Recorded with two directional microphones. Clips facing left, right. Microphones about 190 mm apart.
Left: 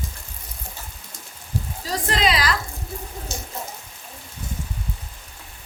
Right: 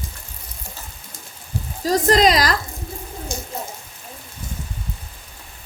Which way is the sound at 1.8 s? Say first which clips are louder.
Right 8 dB; 40° right (ahead or behind).